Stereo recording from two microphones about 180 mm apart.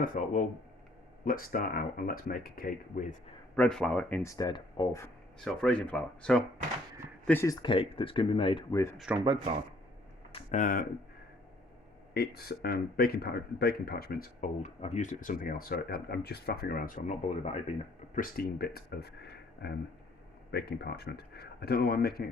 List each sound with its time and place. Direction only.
0.0 s speech: 50° left (ahead or behind)
3.5 s speech: 5° left (ahead or behind)
4.2 s speech: 20° left (ahead or behind)
5.4 s speech: 5° left (ahead or behind); by 8.8 s 30° left (ahead or behind)
9.1 s speech: 10° right (ahead or behind)
10.3 s a sound: 45° left (ahead or behind)
12.1 s speech: 60° left (ahead or behind)
14.6 s speech: 40° left (ahead or behind); by 22.3 s 60° left (ahead or behind)